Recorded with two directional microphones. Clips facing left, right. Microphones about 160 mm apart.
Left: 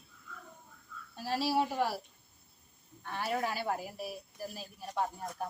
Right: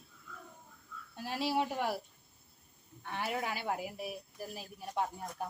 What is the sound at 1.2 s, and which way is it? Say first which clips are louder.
Speech: left 3 dB; 20° right (ahead or behind).